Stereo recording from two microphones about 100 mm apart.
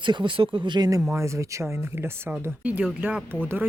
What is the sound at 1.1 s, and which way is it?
Speech, 30° right (ahead or behind).